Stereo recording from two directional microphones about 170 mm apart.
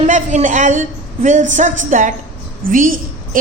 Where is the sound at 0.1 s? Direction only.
45° right (ahead or behind).